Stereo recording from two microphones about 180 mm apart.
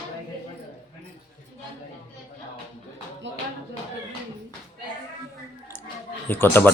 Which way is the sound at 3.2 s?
90° right.